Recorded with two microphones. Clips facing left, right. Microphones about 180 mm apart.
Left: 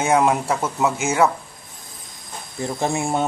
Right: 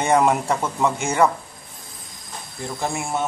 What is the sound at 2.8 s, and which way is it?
Speech, 25° left (ahead or behind).